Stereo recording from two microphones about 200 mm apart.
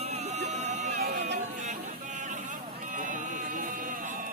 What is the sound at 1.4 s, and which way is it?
Chatter, 35° right (ahead or behind).